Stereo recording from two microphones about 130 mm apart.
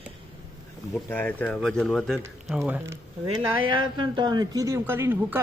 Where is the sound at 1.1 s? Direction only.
15° left (ahead or behind).